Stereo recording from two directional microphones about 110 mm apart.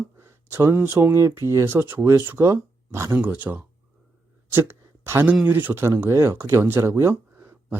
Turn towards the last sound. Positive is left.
turn(degrees=-25)  # may be behind; listen again after turning